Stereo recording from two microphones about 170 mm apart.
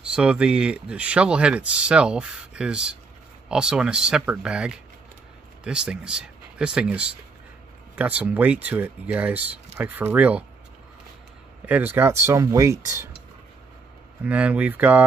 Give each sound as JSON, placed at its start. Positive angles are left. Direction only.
{"t": 0.0, "sound": "speech", "side_deg": -5}
{"t": 11.6, "sound": "speech", "side_deg": -10}
{"t": 14.2, "sound": "speech", "side_deg": -10}